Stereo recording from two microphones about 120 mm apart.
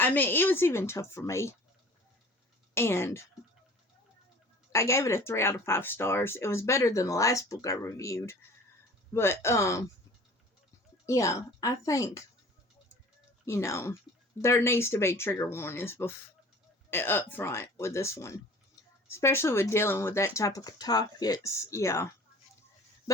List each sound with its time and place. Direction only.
0.0 s speech: 15° left (ahead or behind)
2.7 s speech: 20° left (ahead or behind)
4.7 s speech: 25° left (ahead or behind)
11.0 s speech: 25° left (ahead or behind)
13.4 s speech: 25° left (ahead or behind)